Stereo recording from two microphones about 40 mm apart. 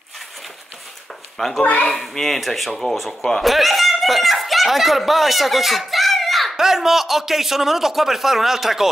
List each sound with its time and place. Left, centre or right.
1.6 s speech: left
1.9 s speech: centre
3.4 s a sound: centre
6.5 s speech: centre